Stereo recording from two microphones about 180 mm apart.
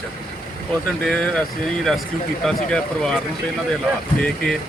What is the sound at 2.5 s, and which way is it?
Speech, 5° left (ahead or behind).